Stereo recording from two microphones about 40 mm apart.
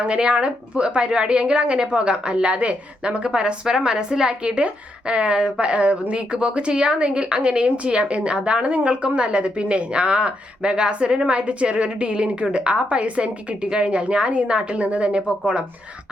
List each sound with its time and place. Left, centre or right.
0.0 s a woman's voice: right